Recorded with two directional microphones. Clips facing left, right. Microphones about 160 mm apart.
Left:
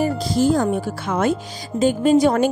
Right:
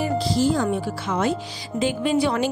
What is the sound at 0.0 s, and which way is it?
Speech, 50° left (ahead or behind).